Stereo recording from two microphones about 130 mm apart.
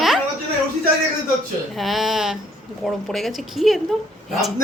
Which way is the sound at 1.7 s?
Centre (ahead or behind).